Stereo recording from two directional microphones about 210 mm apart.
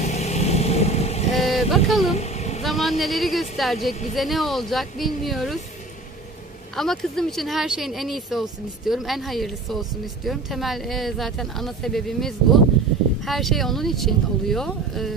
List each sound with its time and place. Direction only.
0.0 s vehicle: 30° left (ahead or behind)
1.3 s vehicle: centre (ahead or behind)
2.0 s vehicle: 30° left (ahead or behind)
2.6 s speech: centre (ahead or behind)
6.7 s speech: centre (ahead or behind)